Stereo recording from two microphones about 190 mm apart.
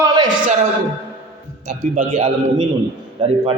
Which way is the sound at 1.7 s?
30° right (ahead or behind).